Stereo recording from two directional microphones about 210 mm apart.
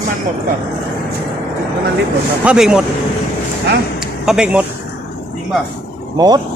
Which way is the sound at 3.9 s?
5° right (ahead or behind).